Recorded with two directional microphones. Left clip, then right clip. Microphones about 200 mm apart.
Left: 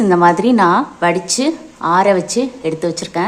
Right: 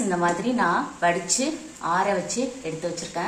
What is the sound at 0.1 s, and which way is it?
A woman's voice, 55° left (ahead or behind).